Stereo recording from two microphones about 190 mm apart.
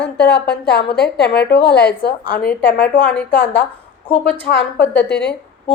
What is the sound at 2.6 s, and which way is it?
A woman's voice, 10° left (ahead or behind).